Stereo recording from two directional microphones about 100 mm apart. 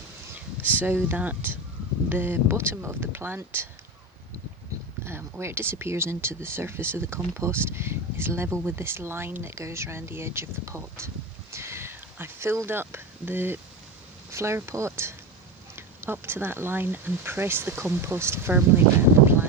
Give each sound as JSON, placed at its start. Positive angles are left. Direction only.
{"t": 0.3, "sound": "speech", "side_deg": -20}
{"t": 5.0, "sound": "speech", "side_deg": -25}
{"t": 11.5, "sound": "a sound", "side_deg": -25}
{"t": 14.3, "sound": "speech", "side_deg": -25}